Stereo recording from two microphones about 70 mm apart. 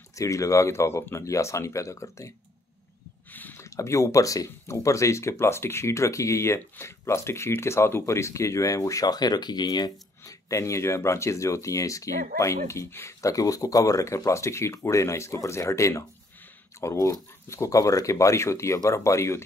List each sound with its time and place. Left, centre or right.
0.1 s speech: left
3.3 s a sound: left
3.5 s speech: left
9.0 s speech: left
10.2 s speech: left